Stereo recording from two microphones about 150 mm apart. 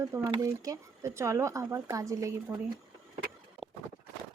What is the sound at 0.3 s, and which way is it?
Speech, 20° right (ahead or behind).